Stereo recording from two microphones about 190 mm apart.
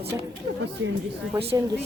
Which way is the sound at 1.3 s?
15° right (ahead or behind).